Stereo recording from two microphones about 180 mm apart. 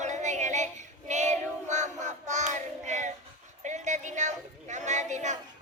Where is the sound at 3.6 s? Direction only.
40° right (ahead or behind).